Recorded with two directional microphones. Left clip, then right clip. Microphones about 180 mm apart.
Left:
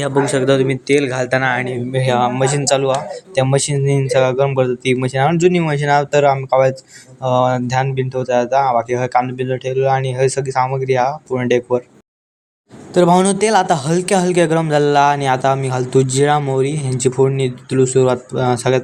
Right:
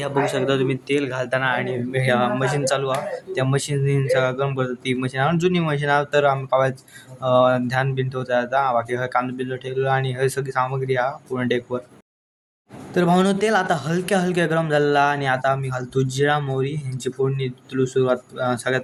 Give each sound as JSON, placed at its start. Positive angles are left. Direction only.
{"t": 0.2, "sound": "a man's voice", "side_deg": 15}
{"t": 12.9, "sound": "a man's voice", "side_deg": 20}